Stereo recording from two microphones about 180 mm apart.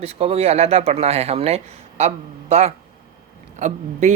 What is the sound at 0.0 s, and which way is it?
Speech, 35° right (ahead or behind).